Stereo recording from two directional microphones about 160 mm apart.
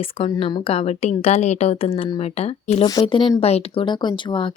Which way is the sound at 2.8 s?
30° left (ahead or behind).